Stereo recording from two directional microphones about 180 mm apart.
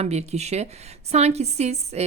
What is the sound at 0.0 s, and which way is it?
A woman's voice, 35° right (ahead or behind).